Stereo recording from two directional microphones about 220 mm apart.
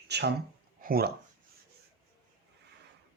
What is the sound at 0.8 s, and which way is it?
Speech, 45° right (ahead or behind).